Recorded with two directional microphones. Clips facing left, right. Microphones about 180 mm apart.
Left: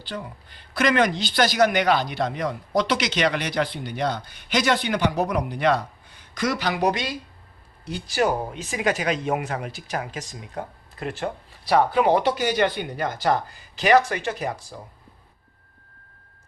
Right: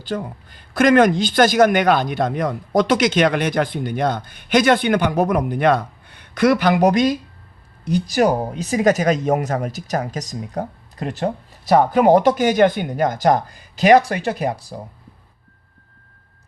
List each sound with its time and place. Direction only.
0.0 s speech: 45° right (ahead or behind)